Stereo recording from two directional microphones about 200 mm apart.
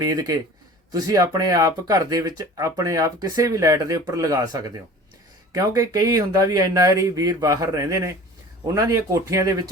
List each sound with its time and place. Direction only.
0.0 s speech: 20° right (ahead or behind)